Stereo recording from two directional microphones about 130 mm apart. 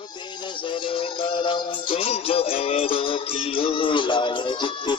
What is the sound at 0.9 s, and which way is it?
Music, 40° left (ahead or behind).